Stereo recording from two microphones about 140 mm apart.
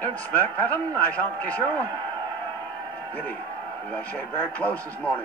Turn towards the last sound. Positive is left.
turn(degrees=10)  # may be behind; listen again after turning